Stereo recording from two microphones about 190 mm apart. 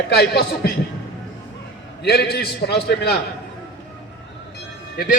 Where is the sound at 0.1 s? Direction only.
55° left (ahead or behind).